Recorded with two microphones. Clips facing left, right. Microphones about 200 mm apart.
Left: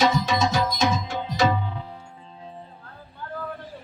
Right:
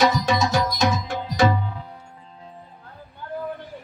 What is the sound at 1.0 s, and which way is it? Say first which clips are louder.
Music: right 3 dB; 50° right (ahead or behind).